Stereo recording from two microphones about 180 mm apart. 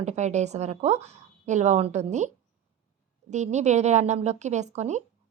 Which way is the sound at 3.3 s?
40° right (ahead or behind).